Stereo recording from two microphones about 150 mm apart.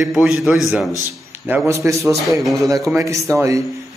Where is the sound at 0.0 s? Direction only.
Centre (ahead or behind).